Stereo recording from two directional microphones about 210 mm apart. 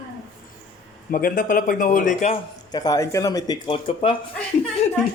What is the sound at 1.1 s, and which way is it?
A man's voice, 40° left (ahead or behind).